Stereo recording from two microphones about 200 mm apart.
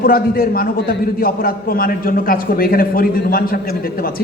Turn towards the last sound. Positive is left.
turn(degrees=45)  # may be behind; listen again after turning